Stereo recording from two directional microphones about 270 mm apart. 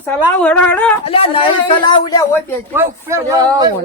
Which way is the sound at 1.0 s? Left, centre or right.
Left.